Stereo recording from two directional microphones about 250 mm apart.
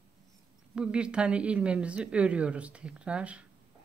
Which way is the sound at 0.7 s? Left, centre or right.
Centre.